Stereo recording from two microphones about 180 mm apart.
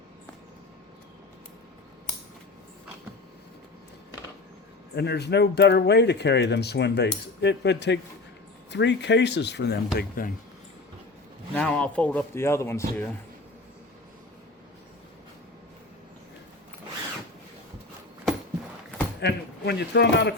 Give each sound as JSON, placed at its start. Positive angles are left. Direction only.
{"t": 4.9, "sound": "speech", "side_deg": 65}
{"t": 10.0, "sound": "speech", "side_deg": 50}
{"t": 11.5, "sound": "a man's voice", "side_deg": 5}
{"t": 19.2, "sound": "speech", "side_deg": 70}